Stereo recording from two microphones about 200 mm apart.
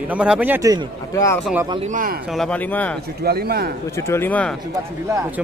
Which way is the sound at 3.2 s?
50° right (ahead or behind).